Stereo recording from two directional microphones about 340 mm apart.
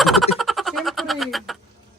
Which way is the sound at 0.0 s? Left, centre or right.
Centre.